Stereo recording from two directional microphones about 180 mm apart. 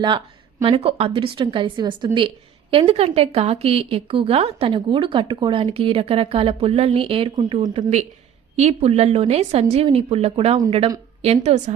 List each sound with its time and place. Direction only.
0.6 s a woman's voice: 30° right (ahead or behind)
7.7 s a woman's voice: 35° right (ahead or behind)